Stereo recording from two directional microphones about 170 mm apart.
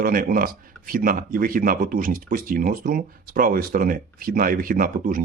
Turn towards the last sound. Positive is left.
turn(degrees=-55)  # may be behind; listen again after turning